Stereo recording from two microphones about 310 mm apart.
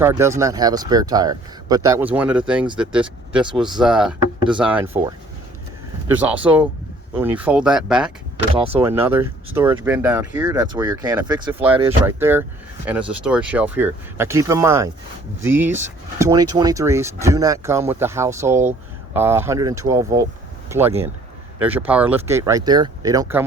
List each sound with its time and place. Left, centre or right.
0.0 s speech: centre
3.4 s speech: centre
3.8 s speech: centre
6.1 s speech: centre